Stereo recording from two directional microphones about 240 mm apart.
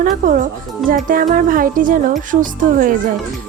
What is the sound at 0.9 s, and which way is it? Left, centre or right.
Speech, right.